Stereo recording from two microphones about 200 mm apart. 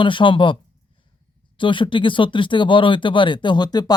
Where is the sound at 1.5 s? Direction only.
25° left (ahead or behind).